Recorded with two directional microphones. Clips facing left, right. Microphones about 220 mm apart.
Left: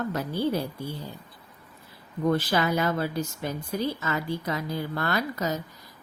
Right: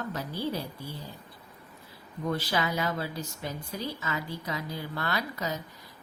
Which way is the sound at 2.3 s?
50° left (ahead or behind).